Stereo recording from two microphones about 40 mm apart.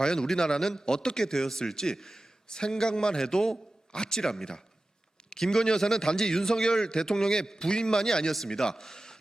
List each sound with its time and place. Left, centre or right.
0.0 s a man's voice: centre